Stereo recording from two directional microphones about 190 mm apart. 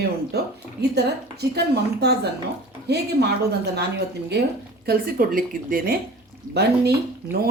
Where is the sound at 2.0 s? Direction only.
60° right (ahead or behind).